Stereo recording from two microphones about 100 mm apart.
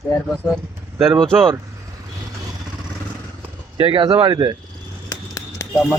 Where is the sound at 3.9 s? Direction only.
55° right (ahead or behind).